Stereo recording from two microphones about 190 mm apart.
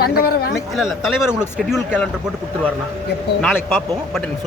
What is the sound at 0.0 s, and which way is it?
Speech, 55° left (ahead or behind).